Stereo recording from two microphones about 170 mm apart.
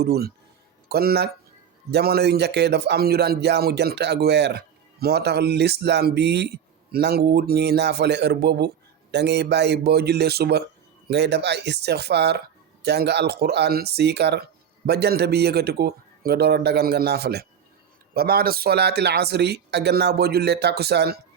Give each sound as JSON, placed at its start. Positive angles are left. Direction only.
{"t": 0.0, "sound": "speech", "side_deg": -70}
{"t": 11.1, "sound": "speech", "side_deg": -80}